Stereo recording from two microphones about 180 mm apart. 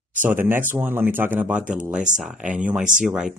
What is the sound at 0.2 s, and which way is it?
Speech, 10° right (ahead or behind).